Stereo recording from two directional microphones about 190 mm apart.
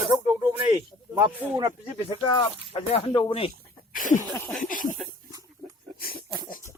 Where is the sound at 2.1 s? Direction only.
25° left (ahead or behind).